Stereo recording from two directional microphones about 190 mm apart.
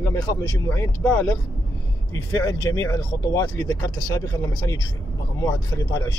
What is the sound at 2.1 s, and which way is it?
Speech, 20° left (ahead or behind).